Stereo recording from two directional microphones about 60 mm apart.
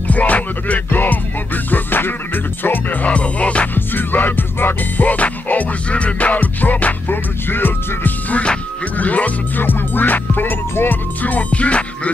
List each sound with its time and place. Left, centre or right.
0.1 s music: left
3.7 s music: left